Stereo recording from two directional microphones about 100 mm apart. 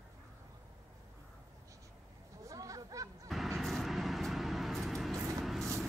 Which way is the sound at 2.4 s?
35° right (ahead or behind).